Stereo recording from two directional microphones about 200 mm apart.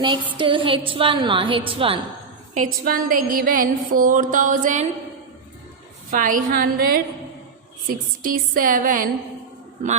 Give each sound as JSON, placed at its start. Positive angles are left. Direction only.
{"t": 0.0, "sound": "a woman's voice", "side_deg": -25}
{"t": 2.8, "sound": "mantra", "side_deg": -45}
{"t": 6.1, "sound": "mantra", "side_deg": -40}
{"t": 8.2, "sound": "mantra", "side_deg": -45}